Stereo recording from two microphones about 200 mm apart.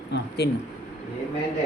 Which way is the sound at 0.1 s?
55° left (ahead or behind).